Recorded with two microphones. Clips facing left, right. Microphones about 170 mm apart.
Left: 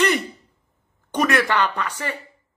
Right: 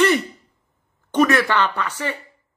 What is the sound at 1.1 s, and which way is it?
Speech, 15° left (ahead or behind).